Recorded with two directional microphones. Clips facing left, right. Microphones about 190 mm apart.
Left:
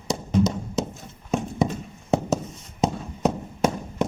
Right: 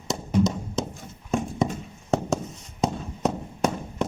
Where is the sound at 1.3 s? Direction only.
Centre (ahead or behind).